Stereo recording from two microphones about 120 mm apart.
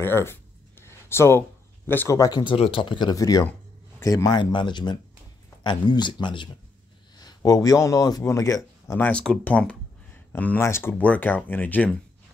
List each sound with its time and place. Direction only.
0.0 s a sound: 20° left (ahead or behind)
1.9 s speech: 15° left (ahead or behind)
2.1 s speech: 35° left (ahead or behind)
2.5 s speech: 50° left (ahead or behind)
7.2 s speech: 30° left (ahead or behind)
8.9 s speech: 15° left (ahead or behind)